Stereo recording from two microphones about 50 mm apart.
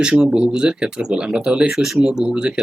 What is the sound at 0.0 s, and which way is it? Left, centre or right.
Speech, centre.